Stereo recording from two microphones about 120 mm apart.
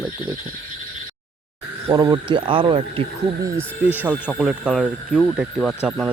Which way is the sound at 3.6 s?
15° right (ahead or behind).